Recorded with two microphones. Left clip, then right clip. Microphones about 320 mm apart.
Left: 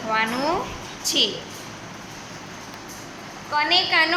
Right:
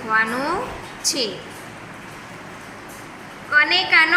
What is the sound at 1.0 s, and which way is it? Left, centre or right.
Speech, left.